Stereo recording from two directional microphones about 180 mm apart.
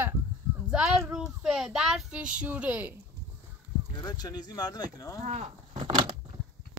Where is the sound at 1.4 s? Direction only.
5° right (ahead or behind).